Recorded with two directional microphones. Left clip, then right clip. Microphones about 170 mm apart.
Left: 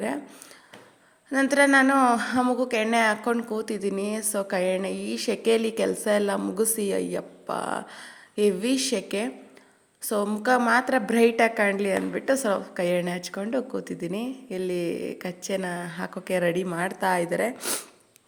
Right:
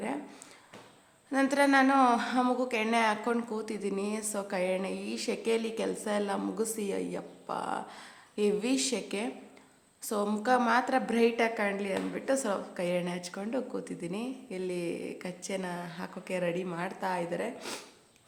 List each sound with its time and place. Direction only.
1.3 s a woman's voice: 25° left (ahead or behind)